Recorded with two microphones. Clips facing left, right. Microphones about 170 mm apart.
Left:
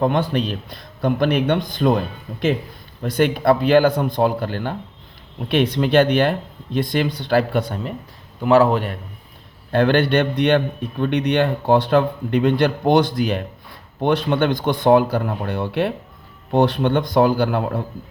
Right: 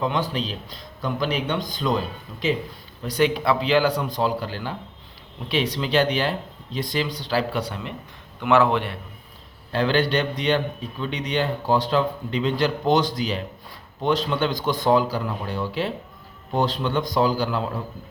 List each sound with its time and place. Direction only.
0.0 s a man's voice: 55° left (ahead or behind)
8.4 s a man's voice: 35° left (ahead or behind)
9.7 s a man's voice: 55° left (ahead or behind)